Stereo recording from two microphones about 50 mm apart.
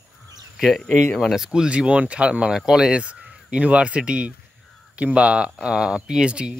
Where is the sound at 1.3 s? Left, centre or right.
Centre.